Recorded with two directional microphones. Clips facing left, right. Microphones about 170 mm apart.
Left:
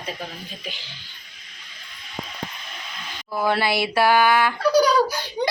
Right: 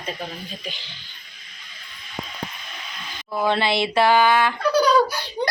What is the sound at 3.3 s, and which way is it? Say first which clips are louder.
Speech: right 1 dB; 5° left (ahead or behind).